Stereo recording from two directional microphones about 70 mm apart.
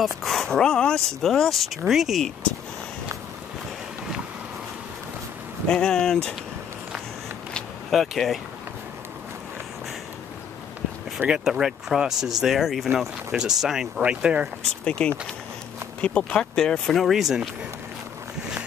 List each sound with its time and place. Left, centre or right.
0.2 s speech: centre
5.7 s speech: centre
7.9 s speech: centre
11.1 s speech: centre
14.9 s speech: centre
17.0 s speech: centre